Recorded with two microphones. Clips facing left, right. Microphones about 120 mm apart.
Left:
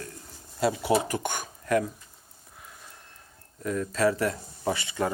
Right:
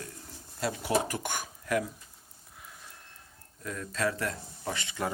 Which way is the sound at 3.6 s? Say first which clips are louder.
Left 7 dB; 5° left (ahead or behind).